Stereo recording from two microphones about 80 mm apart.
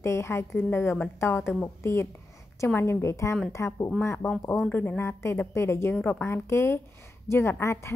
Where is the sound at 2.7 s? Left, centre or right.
Left.